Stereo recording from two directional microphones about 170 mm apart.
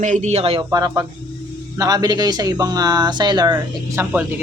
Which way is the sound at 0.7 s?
20° right (ahead or behind).